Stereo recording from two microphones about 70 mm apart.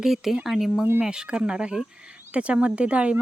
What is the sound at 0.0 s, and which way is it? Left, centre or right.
Speech, centre.